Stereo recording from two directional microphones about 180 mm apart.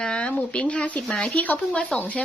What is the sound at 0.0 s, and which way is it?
Speech, 5° left (ahead or behind).